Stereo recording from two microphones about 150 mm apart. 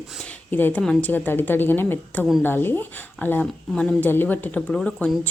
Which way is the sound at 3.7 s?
5° left (ahead or behind).